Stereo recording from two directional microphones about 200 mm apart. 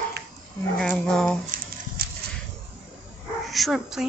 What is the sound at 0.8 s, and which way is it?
Speech, 5° left (ahead or behind).